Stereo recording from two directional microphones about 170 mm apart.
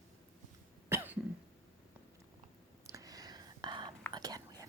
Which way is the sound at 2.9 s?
20° right (ahead or behind).